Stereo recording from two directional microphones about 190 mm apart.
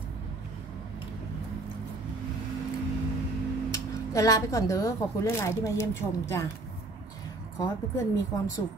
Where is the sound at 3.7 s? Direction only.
15° left (ahead or behind).